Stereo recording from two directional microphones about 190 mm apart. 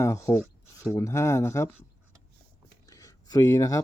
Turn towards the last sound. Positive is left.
turn(degrees=20)  # may be behind; listen again after turning